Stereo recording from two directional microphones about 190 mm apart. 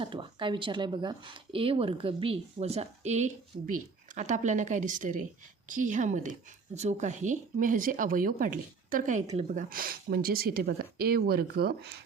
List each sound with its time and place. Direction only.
0.0 s speech: 25° right (ahead or behind); by 9.2 s 45° right (ahead or behind)
9.2 s speech: 30° right (ahead or behind)
9.6 s speech: 50° right (ahead or behind)